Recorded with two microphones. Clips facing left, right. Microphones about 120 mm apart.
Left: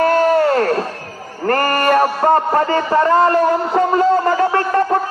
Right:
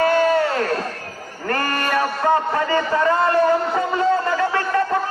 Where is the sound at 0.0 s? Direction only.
45° left (ahead or behind).